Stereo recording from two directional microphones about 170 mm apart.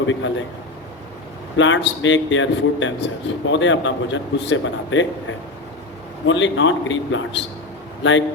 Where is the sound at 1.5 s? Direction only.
90° left.